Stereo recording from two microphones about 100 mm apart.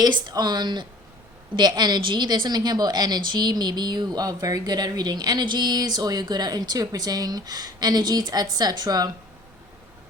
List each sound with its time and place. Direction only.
0.0 s a woman's voice: 45° right (ahead or behind)